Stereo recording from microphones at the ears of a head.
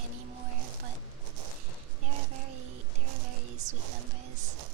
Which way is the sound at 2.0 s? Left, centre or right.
Right.